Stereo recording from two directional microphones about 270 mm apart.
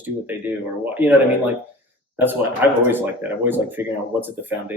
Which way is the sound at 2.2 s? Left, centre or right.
Centre.